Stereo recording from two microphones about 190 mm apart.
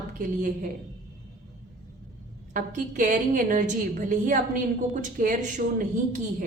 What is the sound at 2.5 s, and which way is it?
A woman's voice, 45° right (ahead or behind).